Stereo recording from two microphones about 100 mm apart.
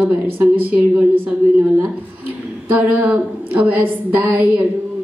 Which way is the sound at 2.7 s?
15° right (ahead or behind).